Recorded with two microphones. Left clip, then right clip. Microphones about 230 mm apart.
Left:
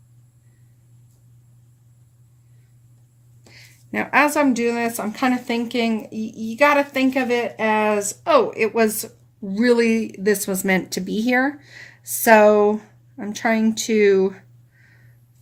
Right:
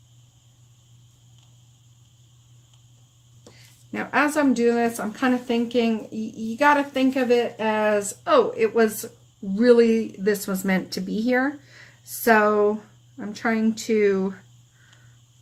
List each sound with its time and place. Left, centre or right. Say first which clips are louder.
3.9 s speech: left 5 dB; left